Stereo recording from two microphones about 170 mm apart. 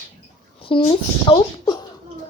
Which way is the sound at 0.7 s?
30° left (ahead or behind).